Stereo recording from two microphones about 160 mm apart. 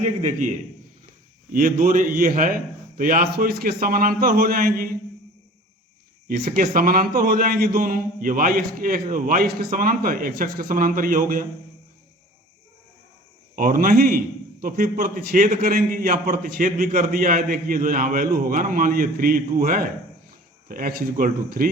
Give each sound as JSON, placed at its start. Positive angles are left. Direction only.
{"t": 0.0, "sound": "a man's voice", "side_deg": -50}
{"t": 1.5, "sound": "a man's voice", "side_deg": -60}
{"t": 6.2, "sound": "a man's voice", "side_deg": -60}
{"t": 13.6, "sound": "a man's voice", "side_deg": -60}